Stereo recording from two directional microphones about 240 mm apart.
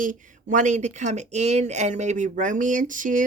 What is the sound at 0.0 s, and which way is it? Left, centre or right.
Speech, right.